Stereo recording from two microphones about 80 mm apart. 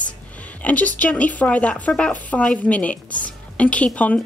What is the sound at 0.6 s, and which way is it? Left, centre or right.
A woman's voice, centre.